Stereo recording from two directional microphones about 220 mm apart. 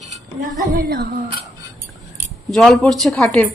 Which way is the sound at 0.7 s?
40° right (ahead or behind).